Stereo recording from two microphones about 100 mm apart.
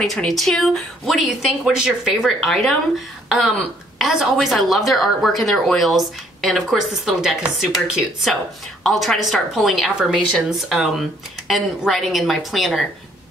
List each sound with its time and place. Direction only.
0.0 s a woman's voice: centre (ahead or behind)
3.3 s a sound: 5° right (ahead or behind)
3.5 s a woman's voice: 5° right (ahead or behind)